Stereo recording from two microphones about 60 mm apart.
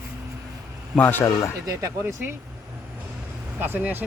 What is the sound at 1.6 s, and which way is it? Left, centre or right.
Speech, right.